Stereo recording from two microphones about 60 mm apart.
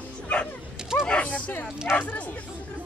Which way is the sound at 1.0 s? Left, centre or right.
Centre.